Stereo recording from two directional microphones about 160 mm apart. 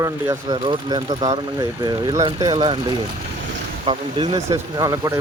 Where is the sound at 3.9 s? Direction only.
30° right (ahead or behind).